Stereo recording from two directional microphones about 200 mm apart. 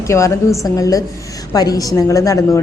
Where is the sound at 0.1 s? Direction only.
15° left (ahead or behind).